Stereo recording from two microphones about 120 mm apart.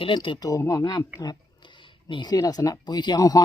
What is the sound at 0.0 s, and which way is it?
Speech, 45° left (ahead or behind).